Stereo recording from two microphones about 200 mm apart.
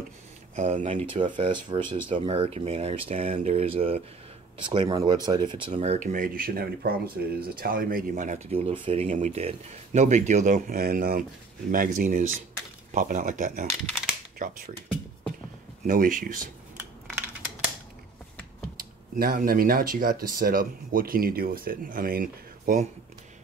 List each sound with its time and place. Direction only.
0.6 s speech: 35° right (ahead or behind)
1.5 s speech: 25° right (ahead or behind)
5.8 s speech: 40° right (ahead or behind)
15.9 s speech: 45° right (ahead or behind)
19.1 s speech: 45° right (ahead or behind)